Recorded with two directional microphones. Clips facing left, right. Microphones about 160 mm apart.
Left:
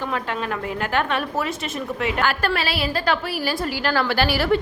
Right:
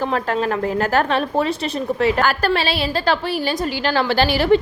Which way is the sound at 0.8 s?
35° right (ahead or behind).